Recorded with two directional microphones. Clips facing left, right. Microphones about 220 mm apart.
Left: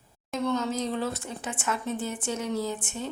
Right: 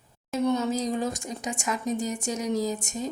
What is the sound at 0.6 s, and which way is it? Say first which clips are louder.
Speech: right 2 dB; 35° right (ahead or behind).